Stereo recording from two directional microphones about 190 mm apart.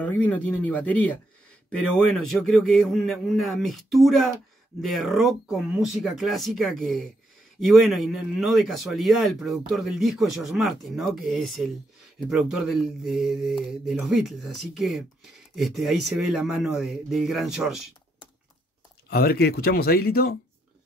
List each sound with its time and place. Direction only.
0.0 s speech: 10° left (ahead or behind)
19.0 s speech: 55° left (ahead or behind)